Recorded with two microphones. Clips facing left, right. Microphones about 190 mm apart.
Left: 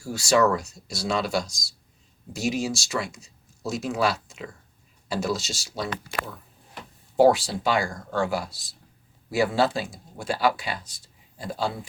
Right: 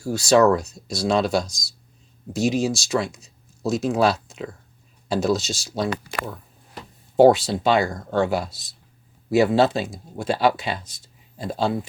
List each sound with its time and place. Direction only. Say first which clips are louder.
0.1 s speech: right 5 dB; 20° right (ahead or behind)
7.2 s speech: right 4 dB; 20° right (ahead or behind)